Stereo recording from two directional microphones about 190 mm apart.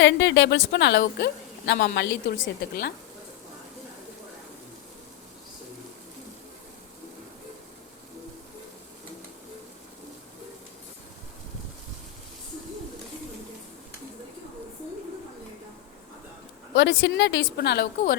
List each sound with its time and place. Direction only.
0.0 s a woman's voice: 70° left (ahead or behind); by 2.9 s 55° left (ahead or behind)
16.7 s a woman's voice: 70° left (ahead or behind)